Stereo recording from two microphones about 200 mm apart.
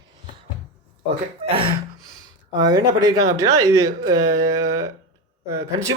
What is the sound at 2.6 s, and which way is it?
Speech, 20° right (ahead or behind).